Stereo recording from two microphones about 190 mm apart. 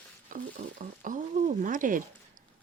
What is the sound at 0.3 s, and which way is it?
Speech, 45° right (ahead or behind).